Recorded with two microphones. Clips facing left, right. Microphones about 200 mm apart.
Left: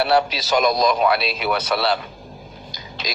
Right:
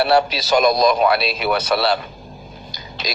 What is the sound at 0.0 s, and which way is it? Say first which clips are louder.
Speech: right 2 dB; 45° right (ahead or behind).